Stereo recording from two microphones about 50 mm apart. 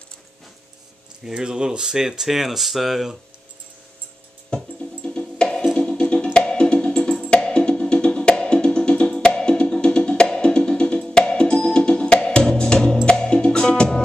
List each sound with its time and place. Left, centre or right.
1.3 s speech: centre
4.5 s music: centre